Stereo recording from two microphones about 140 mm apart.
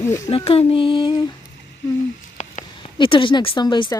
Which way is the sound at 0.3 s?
45° left (ahead or behind).